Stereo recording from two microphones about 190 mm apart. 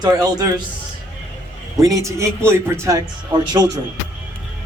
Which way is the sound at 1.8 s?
15° right (ahead or behind).